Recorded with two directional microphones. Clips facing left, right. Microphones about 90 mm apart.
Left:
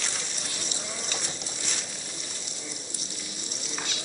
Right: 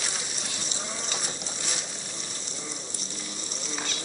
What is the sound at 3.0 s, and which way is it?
Livestock, 35° right (ahead or behind).